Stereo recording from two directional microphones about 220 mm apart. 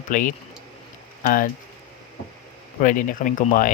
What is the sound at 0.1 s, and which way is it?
Speech, 35° left (ahead or behind).